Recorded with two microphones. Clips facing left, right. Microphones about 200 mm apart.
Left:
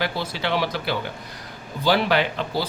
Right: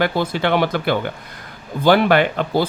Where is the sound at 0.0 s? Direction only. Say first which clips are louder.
Right 7 dB; 55° right (ahead or behind).